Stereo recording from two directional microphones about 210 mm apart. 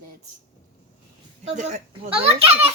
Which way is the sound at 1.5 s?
35° right (ahead or behind).